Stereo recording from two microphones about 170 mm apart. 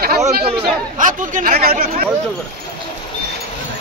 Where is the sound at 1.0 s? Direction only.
50° right (ahead or behind).